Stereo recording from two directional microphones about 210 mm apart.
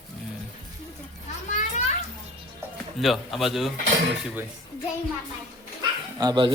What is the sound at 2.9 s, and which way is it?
Speech, centre (ahead or behind).